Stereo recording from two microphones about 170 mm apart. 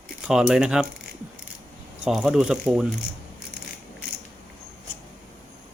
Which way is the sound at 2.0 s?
Centre (ahead or behind).